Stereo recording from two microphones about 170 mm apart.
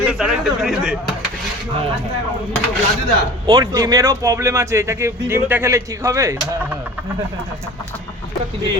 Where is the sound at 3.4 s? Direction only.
20° right (ahead or behind).